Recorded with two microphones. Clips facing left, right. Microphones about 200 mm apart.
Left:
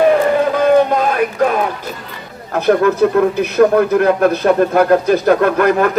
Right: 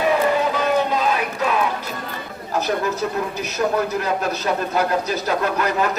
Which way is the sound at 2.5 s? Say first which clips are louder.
Left 9 dB; 60° left (ahead or behind).